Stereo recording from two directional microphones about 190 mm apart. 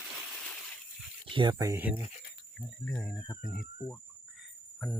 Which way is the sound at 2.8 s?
5° left (ahead or behind).